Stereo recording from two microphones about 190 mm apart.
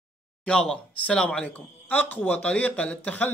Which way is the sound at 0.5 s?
5° left (ahead or behind).